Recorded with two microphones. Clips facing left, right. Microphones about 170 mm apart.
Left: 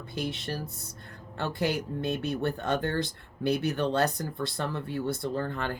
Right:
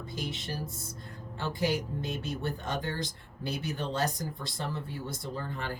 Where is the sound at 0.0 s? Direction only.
60° left (ahead or behind).